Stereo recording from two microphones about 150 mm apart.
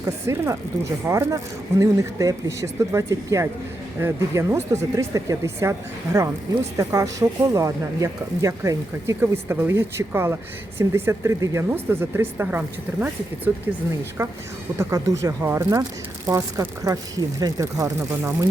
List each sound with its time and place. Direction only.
0.0 s speech: 20° right (ahead or behind)